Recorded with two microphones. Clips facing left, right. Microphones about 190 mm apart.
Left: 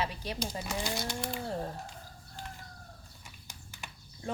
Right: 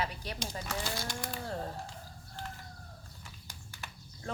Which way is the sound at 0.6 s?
15° left (ahead or behind).